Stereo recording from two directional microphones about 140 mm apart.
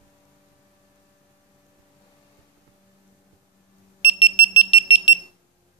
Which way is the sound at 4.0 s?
40° left (ahead or behind).